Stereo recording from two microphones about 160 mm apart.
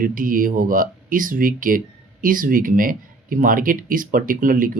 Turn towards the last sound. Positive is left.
turn(degrees=-60)  # may be behind; listen again after turning